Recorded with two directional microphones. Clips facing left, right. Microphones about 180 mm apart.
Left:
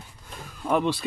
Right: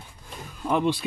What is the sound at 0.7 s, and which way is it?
Speech, 5° left (ahead or behind).